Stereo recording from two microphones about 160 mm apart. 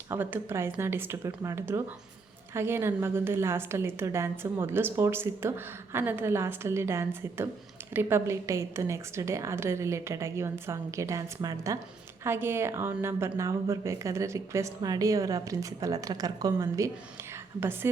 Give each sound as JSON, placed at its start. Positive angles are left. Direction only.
{"t": 0.1, "sound": "a woman's voice", "side_deg": -15}